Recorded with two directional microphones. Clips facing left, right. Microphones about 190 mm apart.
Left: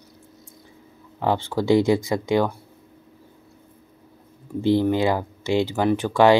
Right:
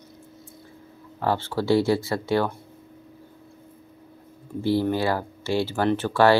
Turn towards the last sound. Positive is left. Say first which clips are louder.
# left 2 dB
turn(degrees=15)  # may be behind; listen again after turning